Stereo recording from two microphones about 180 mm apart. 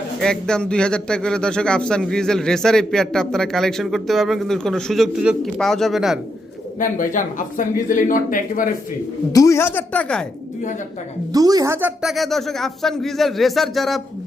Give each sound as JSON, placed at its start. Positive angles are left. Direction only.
{"t": 0.2, "sound": "a man's voice", "side_deg": 5}
{"t": 6.7, "sound": "speech", "side_deg": 50}
{"t": 9.3, "sound": "speech", "side_deg": 15}
{"t": 11.3, "sound": "speech", "side_deg": -20}
{"t": 12.1, "sound": "a man's voice", "side_deg": 0}